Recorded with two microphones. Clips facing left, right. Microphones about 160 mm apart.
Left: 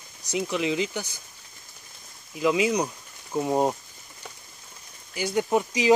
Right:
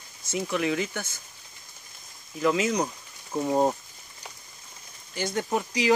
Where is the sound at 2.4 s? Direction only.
15° left (ahead or behind).